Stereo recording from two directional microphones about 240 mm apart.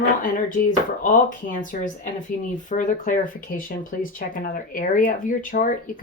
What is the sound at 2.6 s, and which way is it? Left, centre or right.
Speech, left.